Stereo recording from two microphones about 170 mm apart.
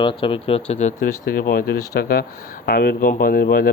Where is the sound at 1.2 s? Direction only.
60° left (ahead or behind).